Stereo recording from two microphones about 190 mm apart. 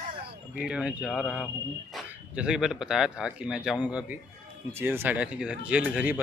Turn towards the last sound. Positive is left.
turn(degrees=-5)  # may be behind; listen again after turning